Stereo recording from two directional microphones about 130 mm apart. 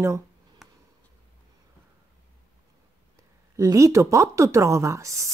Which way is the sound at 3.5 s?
25° right (ahead or behind).